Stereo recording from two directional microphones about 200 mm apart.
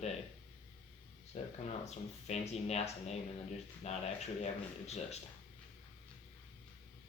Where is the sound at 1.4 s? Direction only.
35° left (ahead or behind).